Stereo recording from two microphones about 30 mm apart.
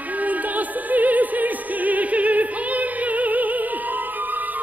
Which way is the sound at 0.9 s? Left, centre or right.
Right.